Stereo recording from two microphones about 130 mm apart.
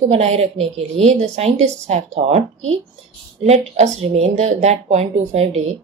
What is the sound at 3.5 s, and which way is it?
A woman's voice, 55° right (ahead or behind).